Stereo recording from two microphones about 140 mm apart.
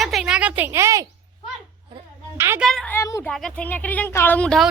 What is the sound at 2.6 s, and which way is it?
Speech, 5° left (ahead or behind).